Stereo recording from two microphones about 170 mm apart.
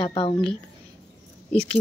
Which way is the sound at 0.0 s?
30° left (ahead or behind).